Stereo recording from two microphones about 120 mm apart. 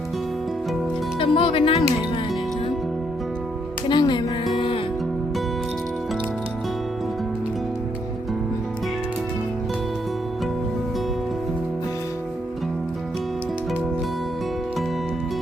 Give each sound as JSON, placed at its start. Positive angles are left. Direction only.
{"t": 1.2, "sound": "music", "side_deg": 45}
{"t": 3.8, "sound": "music", "side_deg": 40}